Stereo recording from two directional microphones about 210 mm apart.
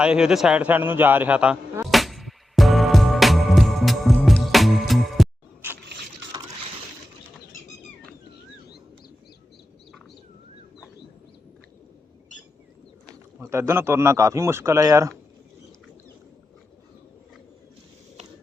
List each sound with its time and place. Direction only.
0.0 s a man's voice: 5° right (ahead or behind)
1.9 s music: centre (ahead or behind)
6.2 s boat: 60° right (ahead or behind)
13.4 s a man's voice: 15° right (ahead or behind)